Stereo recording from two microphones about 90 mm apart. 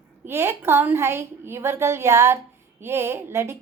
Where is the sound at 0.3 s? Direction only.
30° right (ahead or behind).